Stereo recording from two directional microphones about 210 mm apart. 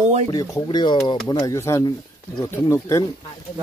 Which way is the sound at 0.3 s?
15° left (ahead or behind).